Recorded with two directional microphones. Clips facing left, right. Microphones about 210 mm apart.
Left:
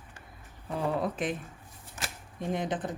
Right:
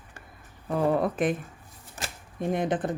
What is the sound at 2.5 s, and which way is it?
Speech, 55° right (ahead or behind).